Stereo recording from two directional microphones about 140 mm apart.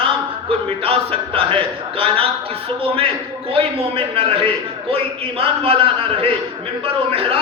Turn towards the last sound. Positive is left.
turn(degrees=-40)  # may be behind; listen again after turning